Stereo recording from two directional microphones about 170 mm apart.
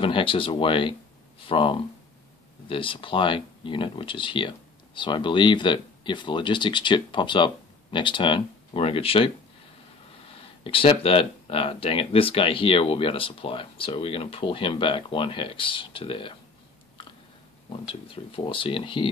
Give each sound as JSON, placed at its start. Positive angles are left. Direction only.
{"t": 0.0, "sound": "speech", "side_deg": 30}
{"t": 17.8, "sound": "speech", "side_deg": 30}